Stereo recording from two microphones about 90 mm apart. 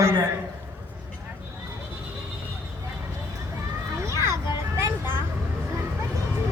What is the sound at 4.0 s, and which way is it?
Children playing, 30° right (ahead or behind).